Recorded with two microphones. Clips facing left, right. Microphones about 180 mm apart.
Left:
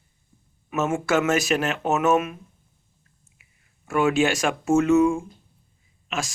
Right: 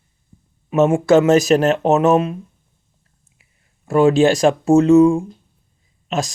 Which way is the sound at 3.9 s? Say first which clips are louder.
Right 8 dB; 35° right (ahead or behind).